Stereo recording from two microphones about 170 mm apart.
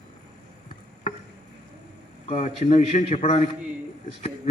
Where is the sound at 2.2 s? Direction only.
35° left (ahead or behind).